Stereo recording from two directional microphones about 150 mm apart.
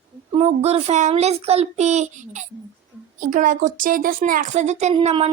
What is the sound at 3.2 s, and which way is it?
A woman's voice, 65° right (ahead or behind).